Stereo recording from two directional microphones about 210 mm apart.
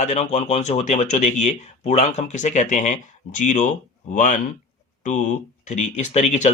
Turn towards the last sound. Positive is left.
turn(degrees=35)  # may be behind; listen again after turning